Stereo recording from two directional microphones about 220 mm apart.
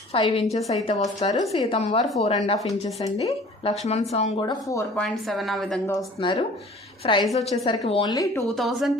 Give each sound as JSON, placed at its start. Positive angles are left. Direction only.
{"t": 0.1, "sound": "a woman's voice", "side_deg": 25}
{"t": 1.0, "sound": "speech", "side_deg": 15}
{"t": 1.8, "sound": "a woman's voice", "side_deg": 30}
{"t": 5.0, "sound": "a woman's voice", "side_deg": 0}
{"t": 6.1, "sound": "a woman's voice", "side_deg": 20}
{"t": 8.4, "sound": "a woman's voice", "side_deg": 0}